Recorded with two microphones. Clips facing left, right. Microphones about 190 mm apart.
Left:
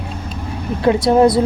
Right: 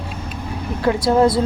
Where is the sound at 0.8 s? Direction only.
25° left (ahead or behind).